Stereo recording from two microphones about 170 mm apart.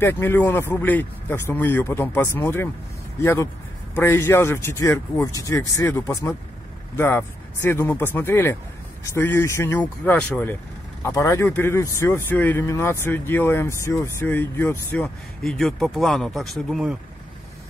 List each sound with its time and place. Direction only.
0.0 s a man's voice: 15° left (ahead or behind)